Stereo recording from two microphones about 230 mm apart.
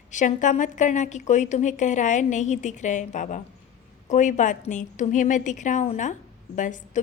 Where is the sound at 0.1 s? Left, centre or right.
Left.